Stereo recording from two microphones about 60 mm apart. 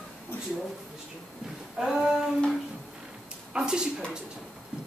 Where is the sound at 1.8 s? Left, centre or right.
Centre.